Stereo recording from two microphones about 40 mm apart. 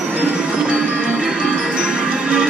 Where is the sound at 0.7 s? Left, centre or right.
Right.